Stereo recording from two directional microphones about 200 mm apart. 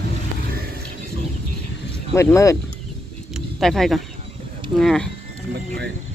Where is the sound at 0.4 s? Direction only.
50° right (ahead or behind).